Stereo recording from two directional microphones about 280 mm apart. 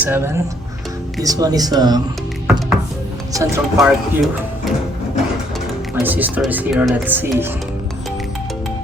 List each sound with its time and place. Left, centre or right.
0.0 s speech: centre
2.5 s music: centre
3.3 s speech: centre
6.0 s speech: centre